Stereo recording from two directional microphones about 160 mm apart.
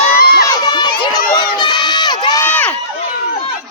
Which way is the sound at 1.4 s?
25° left (ahead or behind).